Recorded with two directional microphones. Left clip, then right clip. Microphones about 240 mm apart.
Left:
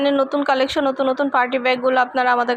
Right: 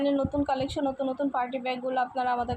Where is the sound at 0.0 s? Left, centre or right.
Centre.